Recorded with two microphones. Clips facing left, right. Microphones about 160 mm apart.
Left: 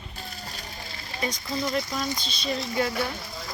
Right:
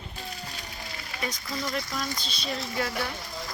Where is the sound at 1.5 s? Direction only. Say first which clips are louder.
Left 5 dB; 20° left (ahead or behind).